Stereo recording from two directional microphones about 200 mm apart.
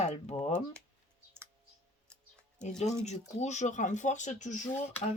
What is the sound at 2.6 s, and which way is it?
Speech, 35° left (ahead or behind).